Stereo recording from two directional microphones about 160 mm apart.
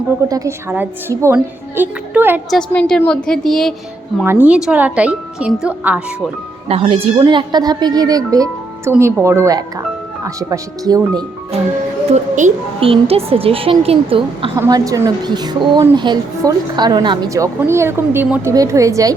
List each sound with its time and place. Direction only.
0.3 s a woman's voice: 20° right (ahead or behind)
2.5 s a woman's voice: 5° left (ahead or behind)
4.2 s a woman's voice: 10° right (ahead or behind)
6.7 s a woman's voice: 35° right (ahead or behind)
12.1 s a woman's voice: 40° right (ahead or behind)
14.5 s a woman's voice: 20° right (ahead or behind)